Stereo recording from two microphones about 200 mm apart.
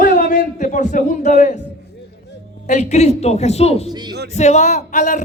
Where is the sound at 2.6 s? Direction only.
35° left (ahead or behind).